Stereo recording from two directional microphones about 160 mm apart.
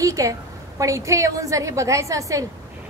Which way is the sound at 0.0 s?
20° right (ahead or behind).